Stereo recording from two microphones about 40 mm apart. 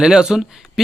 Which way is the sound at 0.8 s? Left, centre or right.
Centre.